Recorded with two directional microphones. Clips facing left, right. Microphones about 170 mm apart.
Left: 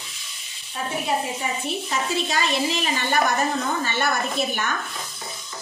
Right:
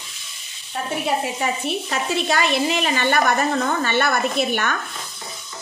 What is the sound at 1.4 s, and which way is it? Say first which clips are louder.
A woman's voice: right 4 dB; 65° right (ahead or behind).